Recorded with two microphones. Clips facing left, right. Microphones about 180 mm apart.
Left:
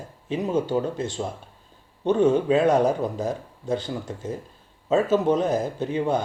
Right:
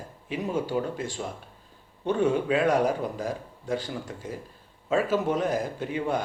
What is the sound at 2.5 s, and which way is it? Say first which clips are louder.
Speech: left 4 dB; 25° left (ahead or behind).